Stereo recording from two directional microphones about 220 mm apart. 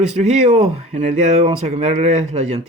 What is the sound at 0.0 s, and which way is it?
Speech, 30° right (ahead or behind).